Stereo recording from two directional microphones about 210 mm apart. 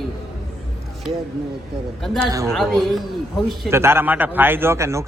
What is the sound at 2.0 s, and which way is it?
Speech, centre (ahead or behind).